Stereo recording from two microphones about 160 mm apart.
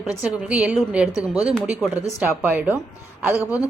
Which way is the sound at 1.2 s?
40° right (ahead or behind).